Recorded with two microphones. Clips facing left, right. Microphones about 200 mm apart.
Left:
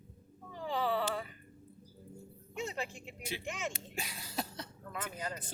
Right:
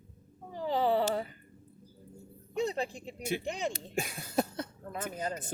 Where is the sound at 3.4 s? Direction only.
35° right (ahead or behind).